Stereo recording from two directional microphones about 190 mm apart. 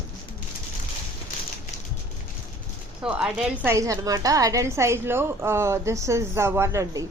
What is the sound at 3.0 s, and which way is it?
A woman's voice, 5° right (ahead or behind).